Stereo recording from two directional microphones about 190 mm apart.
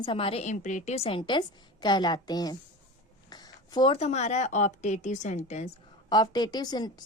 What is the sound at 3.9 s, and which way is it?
A woman's voice, 35° left (ahead or behind).